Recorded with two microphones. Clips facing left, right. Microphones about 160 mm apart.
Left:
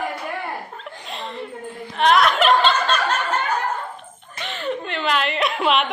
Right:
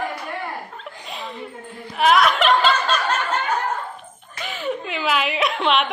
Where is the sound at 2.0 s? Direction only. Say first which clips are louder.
Even; centre (ahead or behind).